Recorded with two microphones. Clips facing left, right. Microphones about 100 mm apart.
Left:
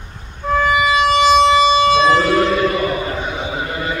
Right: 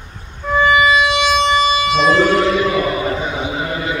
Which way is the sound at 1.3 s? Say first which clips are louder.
Left 3 dB; 45° left (ahead or behind).